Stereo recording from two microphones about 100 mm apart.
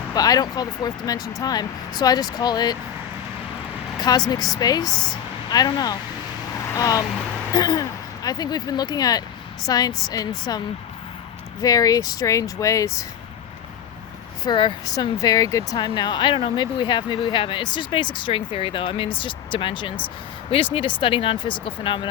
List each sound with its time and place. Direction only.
0.1 s speech: 40° left (ahead or behind)
3.9 s vehicle: 40° left (ahead or behind)
4.3 s speech: 40° left (ahead or behind)
11.6 s speech: 40° left (ahead or behind)
14.4 s speech: 50° left (ahead or behind)
14.9 s speech: 40° left (ahead or behind)
15.8 s speech: 50° left (ahead or behind)